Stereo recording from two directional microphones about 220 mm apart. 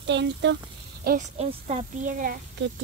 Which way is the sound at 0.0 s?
55° right (ahead or behind).